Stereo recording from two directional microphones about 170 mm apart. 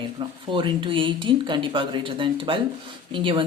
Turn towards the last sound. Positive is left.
turn(degrees=-30)  # may be behind; listen again after turning